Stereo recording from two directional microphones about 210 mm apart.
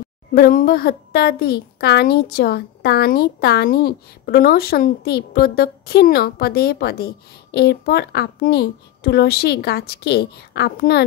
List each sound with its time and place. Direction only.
0.3 s a woman's voice: 40° left (ahead or behind)